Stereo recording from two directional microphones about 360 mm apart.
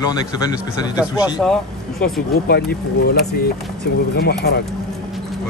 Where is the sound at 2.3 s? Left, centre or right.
Left.